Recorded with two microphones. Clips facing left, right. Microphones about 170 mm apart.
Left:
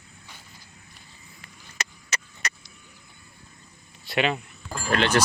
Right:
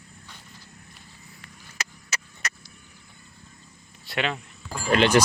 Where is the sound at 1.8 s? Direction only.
5° right (ahead or behind).